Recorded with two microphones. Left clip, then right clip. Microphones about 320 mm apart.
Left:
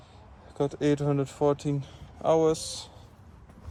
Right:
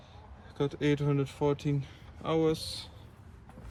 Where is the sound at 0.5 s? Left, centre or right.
Centre.